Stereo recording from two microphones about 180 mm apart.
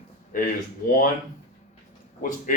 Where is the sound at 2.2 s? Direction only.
45° left (ahead or behind).